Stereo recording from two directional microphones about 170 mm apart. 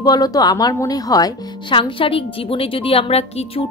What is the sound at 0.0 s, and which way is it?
Speech, 20° left (ahead or behind).